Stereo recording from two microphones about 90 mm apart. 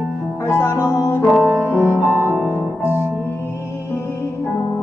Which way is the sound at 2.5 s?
25° left (ahead or behind).